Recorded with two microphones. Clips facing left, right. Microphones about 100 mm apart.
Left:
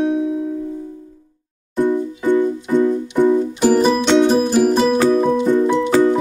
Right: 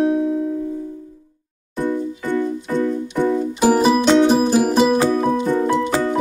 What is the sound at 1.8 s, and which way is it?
Music, 20° left (ahead or behind).